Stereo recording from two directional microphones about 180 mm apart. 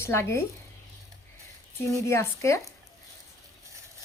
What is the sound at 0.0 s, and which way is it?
Speech, 15° left (ahead or behind).